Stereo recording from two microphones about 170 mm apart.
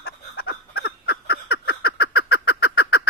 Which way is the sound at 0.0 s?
70° left (ahead or behind).